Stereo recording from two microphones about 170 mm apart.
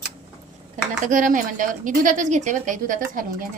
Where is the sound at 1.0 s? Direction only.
50° right (ahead or behind).